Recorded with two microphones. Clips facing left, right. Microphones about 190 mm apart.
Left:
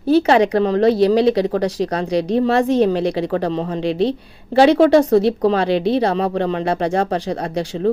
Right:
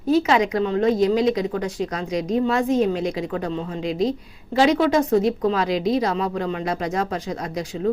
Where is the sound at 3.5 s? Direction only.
75° left (ahead or behind).